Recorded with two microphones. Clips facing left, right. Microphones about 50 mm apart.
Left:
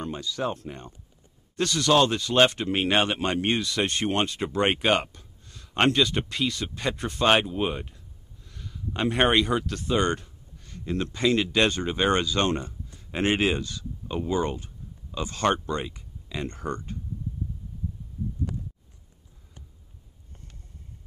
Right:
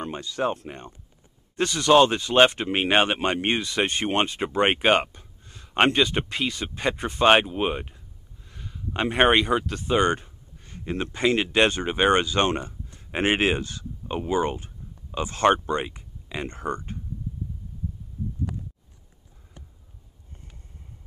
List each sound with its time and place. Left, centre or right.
0.0 s speech: centre
12.8 s a sound: right
13.5 s speech: right